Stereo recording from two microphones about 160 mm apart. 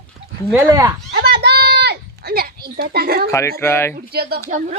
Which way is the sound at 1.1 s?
90° right.